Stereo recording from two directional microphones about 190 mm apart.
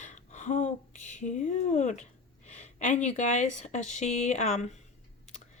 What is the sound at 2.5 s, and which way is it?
Speech, 40° left (ahead or behind).